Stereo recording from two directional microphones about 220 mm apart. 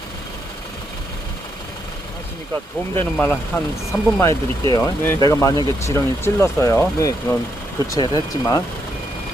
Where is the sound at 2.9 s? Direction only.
10° left (ahead or behind).